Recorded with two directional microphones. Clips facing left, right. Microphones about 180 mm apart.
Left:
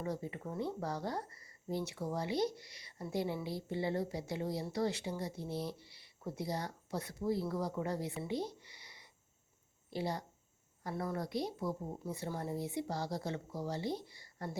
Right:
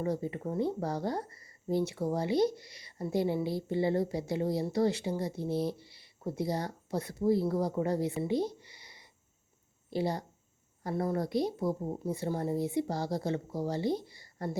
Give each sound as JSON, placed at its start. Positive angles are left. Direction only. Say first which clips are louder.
{"t": 0.0, "sound": "a woman's voice", "louder": "right 7 dB", "side_deg": -35}